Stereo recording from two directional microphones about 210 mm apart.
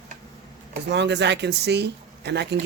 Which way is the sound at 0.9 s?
55° right (ahead or behind).